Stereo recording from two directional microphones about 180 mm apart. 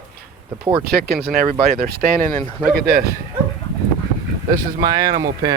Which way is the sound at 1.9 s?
60° right (ahead or behind).